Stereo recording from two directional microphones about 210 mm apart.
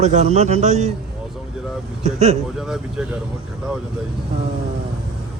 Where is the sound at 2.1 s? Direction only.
30° right (ahead or behind).